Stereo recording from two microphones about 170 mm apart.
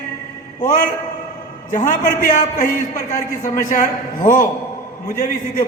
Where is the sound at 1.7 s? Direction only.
45° left (ahead or behind).